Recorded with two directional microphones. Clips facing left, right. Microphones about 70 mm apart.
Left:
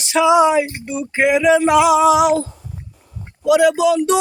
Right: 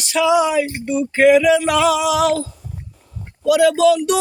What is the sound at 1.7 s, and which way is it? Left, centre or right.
Music, centre.